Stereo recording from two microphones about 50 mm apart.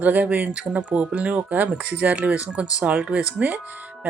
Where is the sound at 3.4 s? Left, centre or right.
Right.